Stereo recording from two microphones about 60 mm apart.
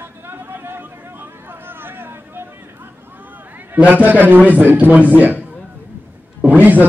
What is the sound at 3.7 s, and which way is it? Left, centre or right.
A man's voice, right.